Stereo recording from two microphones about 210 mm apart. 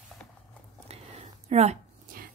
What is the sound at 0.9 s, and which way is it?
Whispering, 30° right (ahead or behind).